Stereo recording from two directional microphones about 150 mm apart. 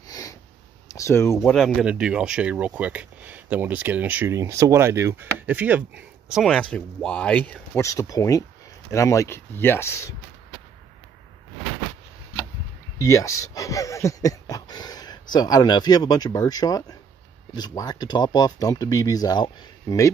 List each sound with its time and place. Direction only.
0.1 s sniff: 25° left (ahead or behind)
0.8 s speech: 20° left (ahead or behind)
1.4 s speech: centre (ahead or behind)
7.8 s speech: 20° left (ahead or behind)
13.0 s speech: 20° left (ahead or behind)